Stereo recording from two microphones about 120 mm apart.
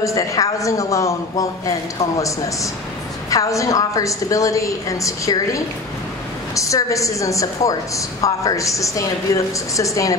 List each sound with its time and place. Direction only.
0.0 s a woman's voice: 25° left (ahead or behind)